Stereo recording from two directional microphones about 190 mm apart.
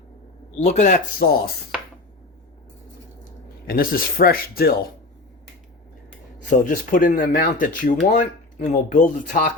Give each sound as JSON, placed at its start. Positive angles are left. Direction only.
{"t": 0.6, "sound": "speech", "side_deg": 40}
{"t": 3.7, "sound": "speech", "side_deg": 50}
{"t": 6.5, "sound": "speech", "side_deg": 45}